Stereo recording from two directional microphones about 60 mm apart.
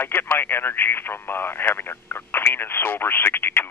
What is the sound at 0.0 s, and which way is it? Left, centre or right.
Speech, left.